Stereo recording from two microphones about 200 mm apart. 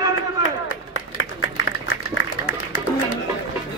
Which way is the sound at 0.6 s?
90° left.